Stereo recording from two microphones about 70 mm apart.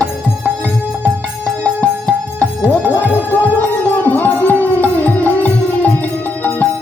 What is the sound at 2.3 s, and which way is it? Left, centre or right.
Music, centre.